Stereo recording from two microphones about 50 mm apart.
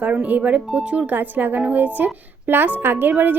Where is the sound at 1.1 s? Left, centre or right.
Right.